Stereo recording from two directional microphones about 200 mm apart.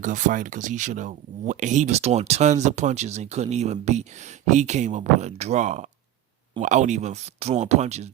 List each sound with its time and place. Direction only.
0.0 s speech: 40° right (ahead or behind)